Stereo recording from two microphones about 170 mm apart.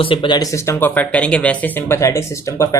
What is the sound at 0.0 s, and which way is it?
Speech, 30° left (ahead or behind).